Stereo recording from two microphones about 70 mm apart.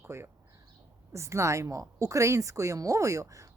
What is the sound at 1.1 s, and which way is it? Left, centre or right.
A woman's voice, right.